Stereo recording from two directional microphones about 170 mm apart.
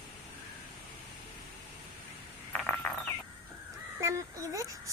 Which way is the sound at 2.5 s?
10° left (ahead or behind).